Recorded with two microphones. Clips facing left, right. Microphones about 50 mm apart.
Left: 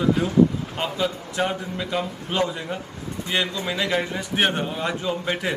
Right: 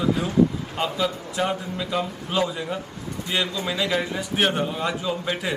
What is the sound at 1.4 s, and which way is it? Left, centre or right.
A man's voice, centre.